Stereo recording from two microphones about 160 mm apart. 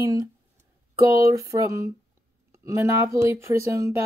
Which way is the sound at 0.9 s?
20° right (ahead or behind).